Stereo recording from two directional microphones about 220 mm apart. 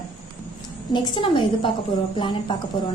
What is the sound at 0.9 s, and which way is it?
A woman's voice, 20° left (ahead or behind).